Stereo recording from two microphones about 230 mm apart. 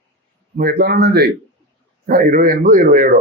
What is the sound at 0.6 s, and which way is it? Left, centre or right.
Speech, right.